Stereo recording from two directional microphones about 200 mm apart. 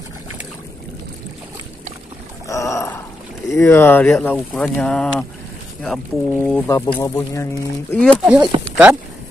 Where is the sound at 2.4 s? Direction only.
15° left (ahead or behind).